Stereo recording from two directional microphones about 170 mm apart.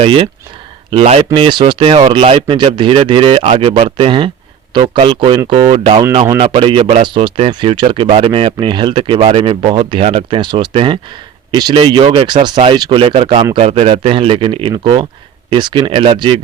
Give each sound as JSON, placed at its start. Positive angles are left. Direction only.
{"t": 0.0, "sound": "speech", "side_deg": -30}